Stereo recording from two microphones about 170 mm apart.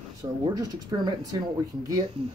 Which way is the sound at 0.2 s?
20° right (ahead or behind).